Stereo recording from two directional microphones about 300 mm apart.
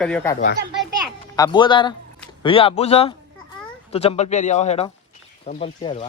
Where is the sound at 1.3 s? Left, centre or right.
Centre.